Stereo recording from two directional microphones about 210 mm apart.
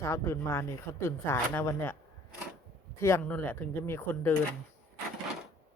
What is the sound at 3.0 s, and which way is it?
Speech, 15° left (ahead or behind).